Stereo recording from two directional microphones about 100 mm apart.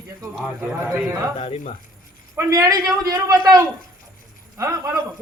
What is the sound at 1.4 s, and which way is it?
Speech, 80° left.